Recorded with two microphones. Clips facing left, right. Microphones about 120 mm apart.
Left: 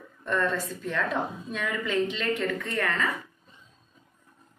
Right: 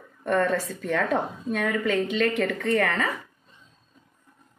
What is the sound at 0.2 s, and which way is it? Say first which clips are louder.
A woman's voice: right 4 dB; 65° right (ahead or behind).